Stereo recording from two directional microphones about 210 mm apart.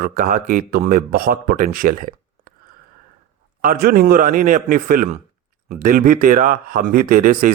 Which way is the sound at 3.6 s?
45° right (ahead or behind).